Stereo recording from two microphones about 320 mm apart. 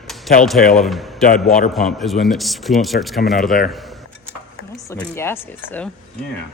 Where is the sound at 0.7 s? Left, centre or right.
Centre.